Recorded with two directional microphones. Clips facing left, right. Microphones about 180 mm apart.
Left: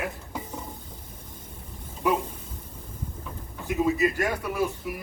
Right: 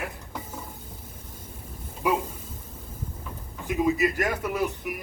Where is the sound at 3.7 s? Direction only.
15° right (ahead or behind).